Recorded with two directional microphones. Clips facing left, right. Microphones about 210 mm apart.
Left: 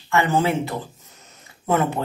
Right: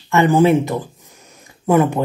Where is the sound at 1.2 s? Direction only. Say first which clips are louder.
Right 6 dB; 10° right (ahead or behind).